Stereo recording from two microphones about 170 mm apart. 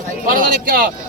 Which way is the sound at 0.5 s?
60° right (ahead or behind).